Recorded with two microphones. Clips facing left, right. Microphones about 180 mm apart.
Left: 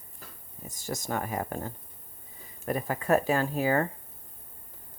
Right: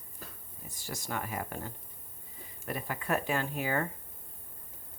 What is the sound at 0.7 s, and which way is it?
Speech, 45° left (ahead or behind).